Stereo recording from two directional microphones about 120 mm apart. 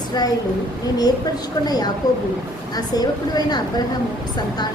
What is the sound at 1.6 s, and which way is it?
Speech, 35° left (ahead or behind).